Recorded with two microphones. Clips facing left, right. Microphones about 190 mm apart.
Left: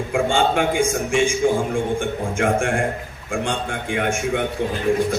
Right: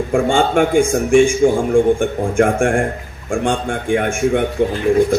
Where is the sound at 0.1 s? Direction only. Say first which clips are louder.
Right 4 dB; 50° right (ahead or behind).